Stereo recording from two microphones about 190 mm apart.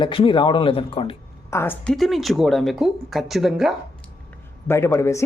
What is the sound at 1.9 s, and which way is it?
Speech, centre (ahead or behind).